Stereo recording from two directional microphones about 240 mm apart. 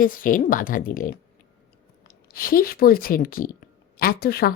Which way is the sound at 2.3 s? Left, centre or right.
Left.